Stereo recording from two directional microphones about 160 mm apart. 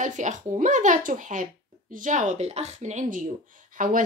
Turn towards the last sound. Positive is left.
turn(degrees=-55)  # may be behind; listen again after turning